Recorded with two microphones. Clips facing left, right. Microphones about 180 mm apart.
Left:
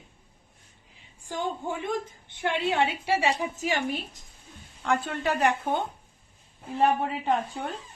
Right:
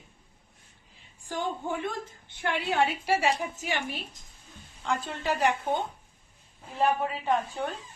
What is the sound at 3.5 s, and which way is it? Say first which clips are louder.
Speech: left 4 dB; 40° left (ahead or behind).